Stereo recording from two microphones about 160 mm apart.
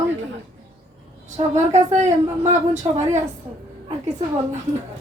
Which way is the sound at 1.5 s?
45° right (ahead or behind).